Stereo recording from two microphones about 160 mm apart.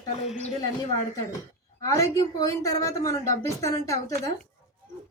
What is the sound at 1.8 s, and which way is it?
Speech, 20° left (ahead or behind).